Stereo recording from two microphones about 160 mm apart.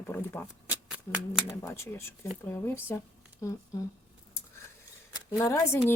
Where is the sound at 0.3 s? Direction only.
15° left (ahead or behind).